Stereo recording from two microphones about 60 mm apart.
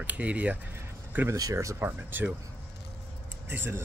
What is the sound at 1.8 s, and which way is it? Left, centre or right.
Speech, right.